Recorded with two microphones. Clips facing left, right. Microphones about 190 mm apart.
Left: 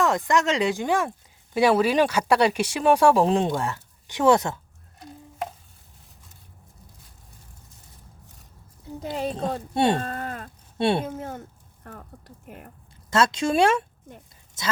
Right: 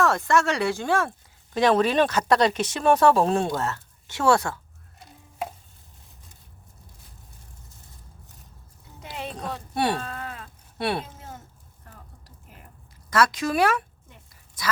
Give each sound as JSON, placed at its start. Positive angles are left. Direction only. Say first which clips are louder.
{"t": 0.0, "sound": "speech", "louder": "even", "side_deg": 15}
{"t": 9.0, "sound": "speech", "louder": "left 7 dB", "side_deg": 35}
{"t": 10.0, "sound": "moo", "louder": "left 4 dB", "side_deg": 45}
{"t": 10.8, "sound": "speech", "louder": "left 5 dB", "side_deg": 25}
{"t": 11.0, "sound": "speech", "louder": "left 10 dB", "side_deg": 55}
{"t": 12.5, "sound": "whispering", "louder": "left 9 dB", "side_deg": 55}
{"t": 13.1, "sound": "speech", "louder": "left 1 dB", "side_deg": 25}